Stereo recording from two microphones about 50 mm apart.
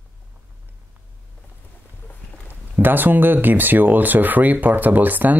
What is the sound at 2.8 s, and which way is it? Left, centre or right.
Speech, right.